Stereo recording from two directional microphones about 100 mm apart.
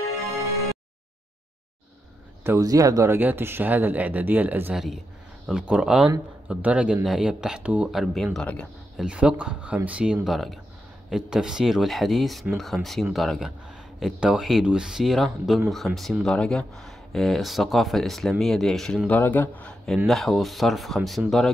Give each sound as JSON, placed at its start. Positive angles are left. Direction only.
{"t": 2.4, "sound": "speech", "side_deg": -30}
{"t": 3.2, "sound": "speech", "side_deg": -20}
{"t": 4.7, "sound": "speech", "side_deg": -5}
{"t": 7.9, "sound": "speech", "side_deg": 0}
{"t": 8.9, "sound": "speech", "side_deg": -10}
{"t": 19.0, "sound": "speech", "side_deg": 20}
{"t": 20.1, "sound": "speech", "side_deg": 0}